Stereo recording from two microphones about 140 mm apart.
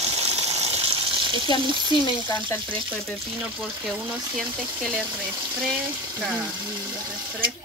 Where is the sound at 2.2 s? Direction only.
15° left (ahead or behind).